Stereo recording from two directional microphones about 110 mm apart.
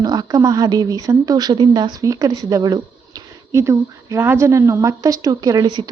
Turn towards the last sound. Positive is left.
turn(degrees=-35)  # may be behind; listen again after turning